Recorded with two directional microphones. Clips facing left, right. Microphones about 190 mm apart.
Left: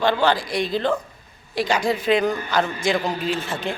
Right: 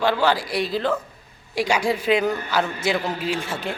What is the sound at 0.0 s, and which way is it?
A man's voice, 10° right (ahead or behind).